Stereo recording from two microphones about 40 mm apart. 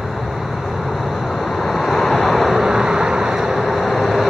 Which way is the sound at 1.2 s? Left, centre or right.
Centre.